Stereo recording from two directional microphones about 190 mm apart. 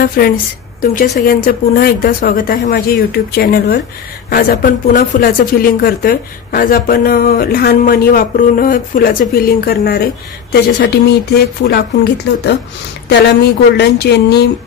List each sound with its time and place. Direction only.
0.2 s speech: 50° left (ahead or behind)